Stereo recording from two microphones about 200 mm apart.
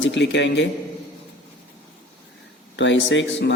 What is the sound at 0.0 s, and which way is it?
Speech, 65° left (ahead or behind).